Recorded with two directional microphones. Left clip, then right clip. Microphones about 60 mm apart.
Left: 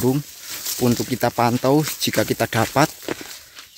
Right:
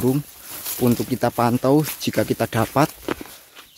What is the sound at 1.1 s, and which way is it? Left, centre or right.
Speech, centre.